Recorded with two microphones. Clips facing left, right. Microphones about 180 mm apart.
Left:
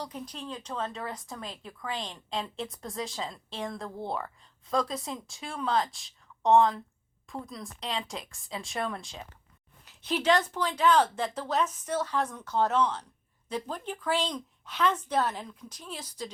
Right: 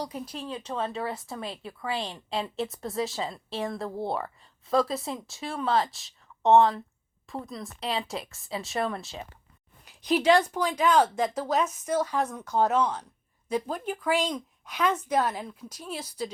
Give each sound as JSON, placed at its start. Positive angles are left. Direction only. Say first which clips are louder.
{"t": 0.0, "sound": "speech", "louder": "right 4 dB", "side_deg": -10}
{"t": 3.8, "sound": "speech", "louder": "right 5 dB", "side_deg": -30}
{"t": 4.1, "sound": "speech", "louder": "right 3 dB", "side_deg": -5}